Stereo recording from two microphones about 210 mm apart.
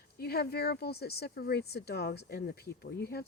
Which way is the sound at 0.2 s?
50° left (ahead or behind).